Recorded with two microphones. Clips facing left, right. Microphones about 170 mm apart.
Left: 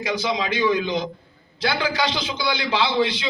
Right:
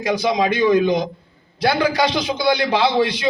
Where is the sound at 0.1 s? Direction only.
50° right (ahead or behind).